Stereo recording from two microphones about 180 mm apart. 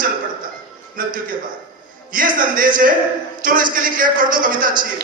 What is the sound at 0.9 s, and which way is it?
A man's voice, 50° right (ahead or behind).